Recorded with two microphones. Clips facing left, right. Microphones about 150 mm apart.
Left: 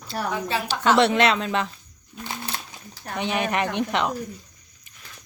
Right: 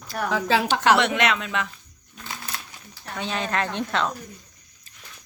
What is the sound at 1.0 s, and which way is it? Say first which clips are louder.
Speech: left 4 dB; 30° left (ahead or behind).